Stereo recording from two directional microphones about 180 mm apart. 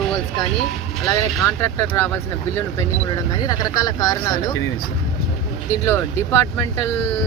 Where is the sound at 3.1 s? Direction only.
20° left (ahead or behind).